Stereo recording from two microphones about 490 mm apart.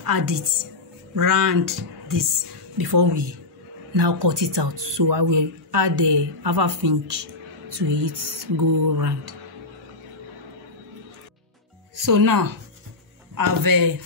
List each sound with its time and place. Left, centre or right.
0.0 s a man's voice: right
11.9 s speech: right